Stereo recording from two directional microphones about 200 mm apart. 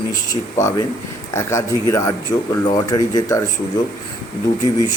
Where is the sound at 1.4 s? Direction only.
15° left (ahead or behind).